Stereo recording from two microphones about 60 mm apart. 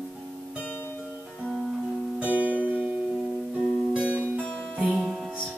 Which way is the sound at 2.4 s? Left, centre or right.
Right.